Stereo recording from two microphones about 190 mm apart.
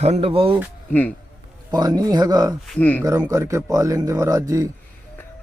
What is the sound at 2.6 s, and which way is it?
Speech, 10° left (ahead or behind).